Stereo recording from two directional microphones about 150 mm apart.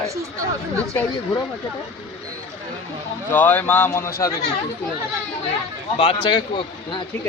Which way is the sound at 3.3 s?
10° left (ahead or behind).